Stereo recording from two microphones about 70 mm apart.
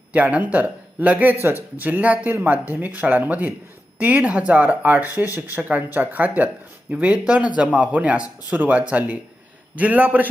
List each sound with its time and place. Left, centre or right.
0.1 s speech: right